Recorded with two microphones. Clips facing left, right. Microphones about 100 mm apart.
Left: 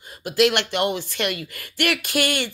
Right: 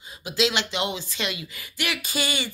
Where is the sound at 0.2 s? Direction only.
55° left (ahead or behind).